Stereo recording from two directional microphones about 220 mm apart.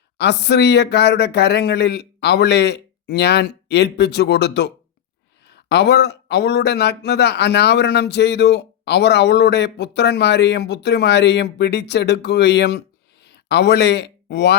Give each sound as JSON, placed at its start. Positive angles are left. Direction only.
{"t": 0.2, "sound": "speech", "side_deg": 50}